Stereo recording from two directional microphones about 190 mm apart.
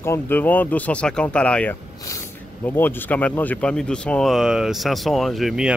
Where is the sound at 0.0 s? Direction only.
10° left (ahead or behind).